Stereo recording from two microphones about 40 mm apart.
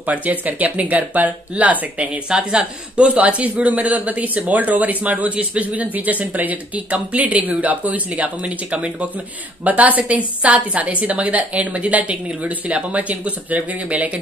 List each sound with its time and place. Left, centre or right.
0.0 s speech: right
2.2 s speech: right
3.1 s speech: right
9.7 s speech: right